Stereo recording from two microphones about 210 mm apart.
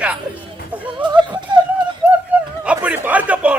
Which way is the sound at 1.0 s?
20° right (ahead or behind).